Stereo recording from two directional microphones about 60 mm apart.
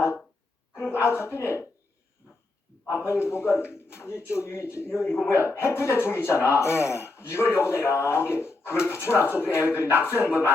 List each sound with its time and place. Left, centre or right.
0.8 s speech: left
2.9 s speech: left